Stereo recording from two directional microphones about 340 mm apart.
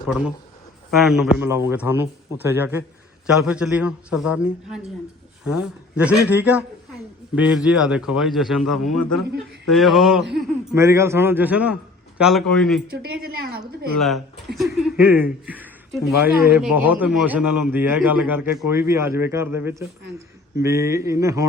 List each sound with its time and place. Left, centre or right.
0.1 s a man's voice: centre
13.1 s a woman's voice: right
14.0 s a man's voice: centre